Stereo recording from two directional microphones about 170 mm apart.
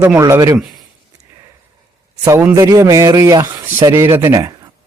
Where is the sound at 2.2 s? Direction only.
15° right (ahead or behind).